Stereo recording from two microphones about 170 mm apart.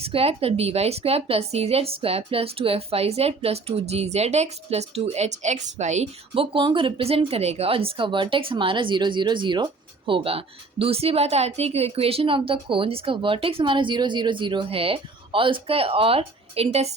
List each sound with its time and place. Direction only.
0.0 s speech: 35° right (ahead or behind)